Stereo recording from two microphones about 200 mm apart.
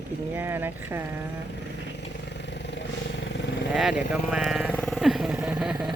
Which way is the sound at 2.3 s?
60° left (ahead or behind).